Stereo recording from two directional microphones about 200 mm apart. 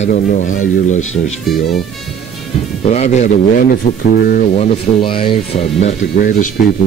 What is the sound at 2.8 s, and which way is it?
Speech, 35° left (ahead or behind).